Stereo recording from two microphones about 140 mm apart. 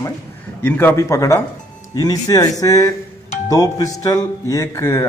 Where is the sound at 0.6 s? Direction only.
15° left (ahead or behind).